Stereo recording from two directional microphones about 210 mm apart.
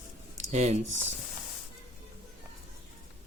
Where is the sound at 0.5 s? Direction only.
35° right (ahead or behind).